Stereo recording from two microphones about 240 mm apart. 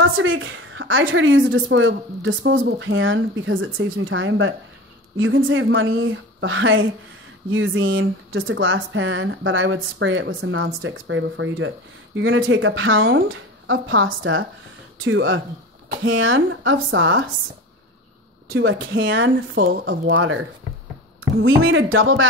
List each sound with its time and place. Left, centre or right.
0.0 s a woman's voice: right
18.5 s speech: right
21.4 s speech: right